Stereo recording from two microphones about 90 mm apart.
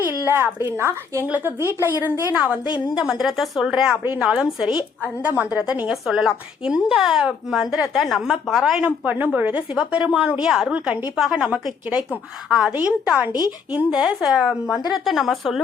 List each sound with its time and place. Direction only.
0.1 s a woman's voice: 25° right (ahead or behind)
2.3 s a woman's voice: 15° right (ahead or behind)
5.2 s a woman's voice: 20° right (ahead or behind)
5.9 s a woman's voice: 5° right (ahead or behind)
9.0 s a woman's voice: 15° right (ahead or behind)
14.9 s a woman's voice: centre (ahead or behind)